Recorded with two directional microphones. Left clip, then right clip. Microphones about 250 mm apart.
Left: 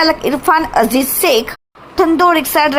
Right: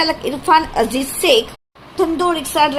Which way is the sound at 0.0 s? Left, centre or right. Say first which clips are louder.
Left 6 dB; centre.